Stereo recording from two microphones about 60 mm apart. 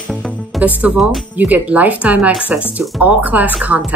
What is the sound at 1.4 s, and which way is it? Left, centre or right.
Speech, right.